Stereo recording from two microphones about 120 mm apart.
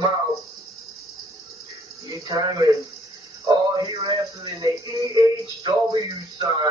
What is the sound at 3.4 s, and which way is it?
Music, 30° right (ahead or behind).